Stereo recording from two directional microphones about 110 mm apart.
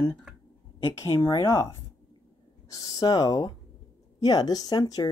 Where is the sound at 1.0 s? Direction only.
30° left (ahead or behind).